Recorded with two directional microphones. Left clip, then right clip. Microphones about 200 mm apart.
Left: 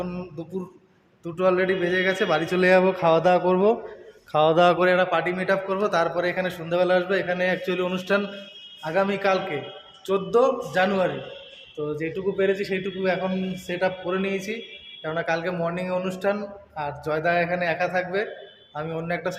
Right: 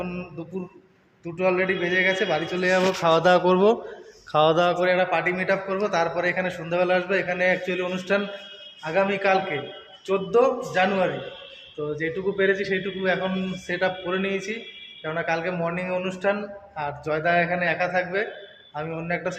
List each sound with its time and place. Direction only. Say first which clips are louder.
0.0 s a man's voice: even; 15° left (ahead or behind)
2.1 s a man's voice: left 2 dB; 35° left (ahead or behind)
3.0 s a man's voice: right 1 dB; 10° left (ahead or behind)
4.6 s a man's voice: left 3 dB; 40° left (ahead or behind)
4.9 s a man's voice: even; 15° left (ahead or behind)